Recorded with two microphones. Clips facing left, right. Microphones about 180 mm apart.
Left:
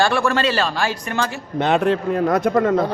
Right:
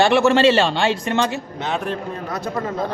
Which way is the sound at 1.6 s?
65° left (ahead or behind).